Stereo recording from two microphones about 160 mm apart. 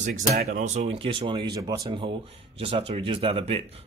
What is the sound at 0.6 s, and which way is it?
Speech, 40° right (ahead or behind).